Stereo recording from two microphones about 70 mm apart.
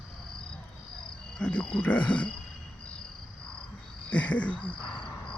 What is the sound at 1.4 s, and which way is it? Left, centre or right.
Speech, centre.